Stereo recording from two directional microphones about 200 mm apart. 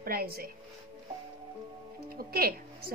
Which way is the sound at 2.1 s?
50° right (ahead or behind).